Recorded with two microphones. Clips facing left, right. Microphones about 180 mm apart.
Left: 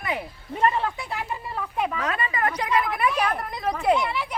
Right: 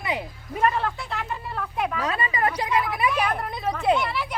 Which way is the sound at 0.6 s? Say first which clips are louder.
Even; centre (ahead or behind).